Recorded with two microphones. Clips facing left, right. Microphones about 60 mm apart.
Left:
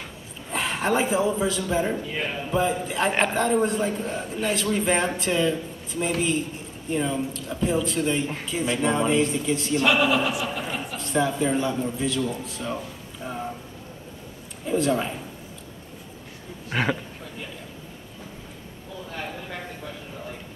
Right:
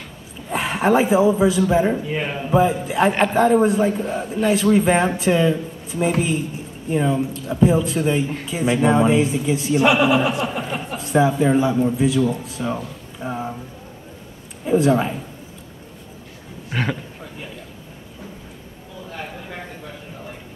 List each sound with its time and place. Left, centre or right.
0.5 s a man's voice: centre
14.7 s a man's voice: centre
16.6 s speech: centre